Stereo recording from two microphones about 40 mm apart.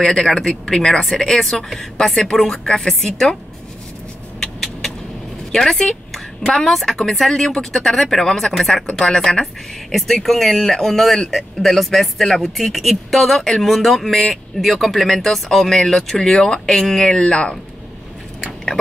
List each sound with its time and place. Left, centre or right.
0.0 s a woman's voice: centre
4.4 s vehicle: centre
5.6 s a woman's voice: centre
16.3 s speech: left